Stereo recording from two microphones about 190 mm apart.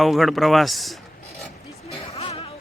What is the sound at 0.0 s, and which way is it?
Speech, centre (ahead or behind).